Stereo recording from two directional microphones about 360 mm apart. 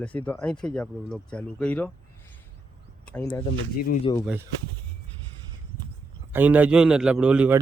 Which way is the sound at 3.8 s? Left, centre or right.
Left.